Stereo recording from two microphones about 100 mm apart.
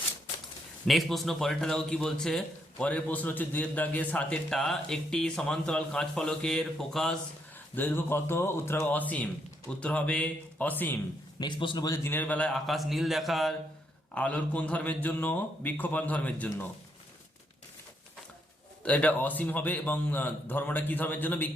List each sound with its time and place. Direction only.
0.9 s speech: centre (ahead or behind)
7.8 s speech: 20° left (ahead or behind)
11.3 s a man's voice: 50° left (ahead or behind)
12.0 s speech: 20° left (ahead or behind)
12.5 s speech: centre (ahead or behind)
14.1 s speech: 15° left (ahead or behind)
18.8 s speech: 15° left (ahead or behind)